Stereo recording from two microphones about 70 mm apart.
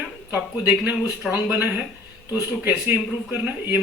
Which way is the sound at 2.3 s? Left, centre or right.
Right.